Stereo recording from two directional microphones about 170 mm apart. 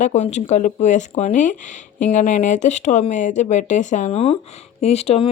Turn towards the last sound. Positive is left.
turn(degrees=35)  # may be behind; listen again after turning